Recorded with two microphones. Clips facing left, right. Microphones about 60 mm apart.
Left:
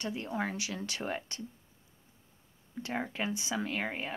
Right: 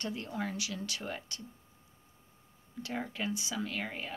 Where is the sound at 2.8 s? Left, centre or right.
Left.